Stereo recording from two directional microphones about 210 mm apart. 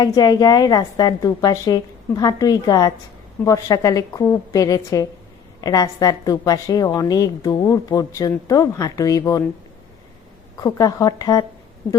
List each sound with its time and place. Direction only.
0.0 s a woman's voice: 20° left (ahead or behind)
10.6 s a woman's voice: 15° left (ahead or behind)